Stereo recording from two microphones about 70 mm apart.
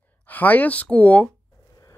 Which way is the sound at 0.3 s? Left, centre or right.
Left.